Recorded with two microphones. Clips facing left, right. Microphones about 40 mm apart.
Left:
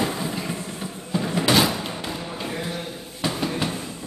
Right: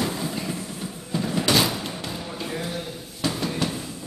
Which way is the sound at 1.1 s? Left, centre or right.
Centre.